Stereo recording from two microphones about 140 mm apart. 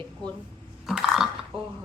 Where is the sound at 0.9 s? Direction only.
5° right (ahead or behind).